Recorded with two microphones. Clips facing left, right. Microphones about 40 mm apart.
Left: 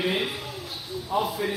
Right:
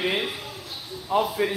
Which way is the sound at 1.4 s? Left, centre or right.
Right.